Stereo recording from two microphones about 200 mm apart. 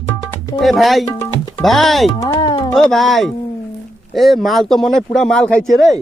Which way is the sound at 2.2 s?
20° left (ahead or behind).